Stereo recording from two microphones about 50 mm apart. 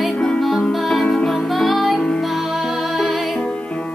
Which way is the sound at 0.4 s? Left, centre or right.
Centre.